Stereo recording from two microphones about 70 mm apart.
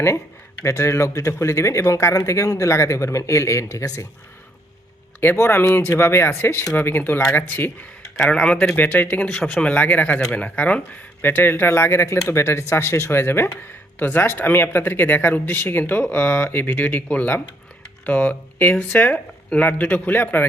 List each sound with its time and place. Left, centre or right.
0.6 s speech: left
5.2 s speech: left
8.2 s speech: centre
8.7 s speech: left
9.3 s speech: centre
11.2 s speech: left